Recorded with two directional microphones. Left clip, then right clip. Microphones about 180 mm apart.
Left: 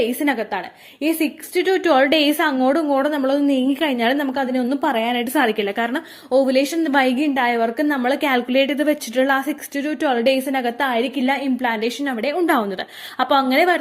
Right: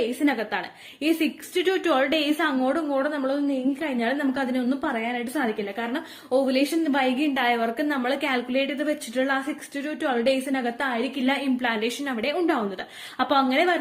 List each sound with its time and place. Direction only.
0.2 s a woman's voice: 30° left (ahead or behind); by 4.3 s 45° left (ahead or behind)
4.4 s a woman's voice: 30° left (ahead or behind)